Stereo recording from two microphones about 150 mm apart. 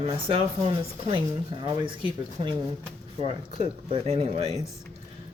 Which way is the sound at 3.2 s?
40° right (ahead or behind).